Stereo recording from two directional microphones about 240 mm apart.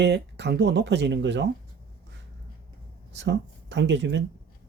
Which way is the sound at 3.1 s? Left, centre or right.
Right.